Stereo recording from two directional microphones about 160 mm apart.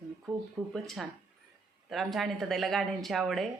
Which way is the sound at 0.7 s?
Centre (ahead or behind).